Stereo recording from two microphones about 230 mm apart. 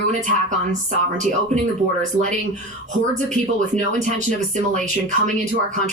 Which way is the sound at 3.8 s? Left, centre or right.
Right.